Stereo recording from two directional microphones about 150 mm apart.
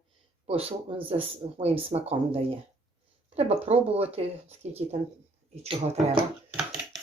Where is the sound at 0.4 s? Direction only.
40° right (ahead or behind).